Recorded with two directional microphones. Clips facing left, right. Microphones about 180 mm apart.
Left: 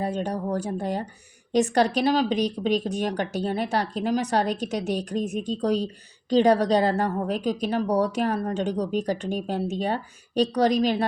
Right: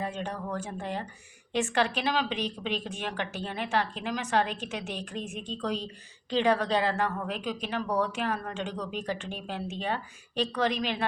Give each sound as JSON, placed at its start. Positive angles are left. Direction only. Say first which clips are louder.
{"t": 0.0, "sound": "a woman's voice", "louder": "left 7 dB", "side_deg": 40}